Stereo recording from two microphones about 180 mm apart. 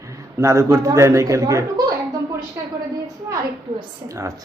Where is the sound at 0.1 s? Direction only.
15° right (ahead or behind).